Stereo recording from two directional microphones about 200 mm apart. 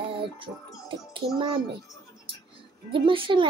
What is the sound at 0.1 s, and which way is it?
Music, 25° right (ahead or behind).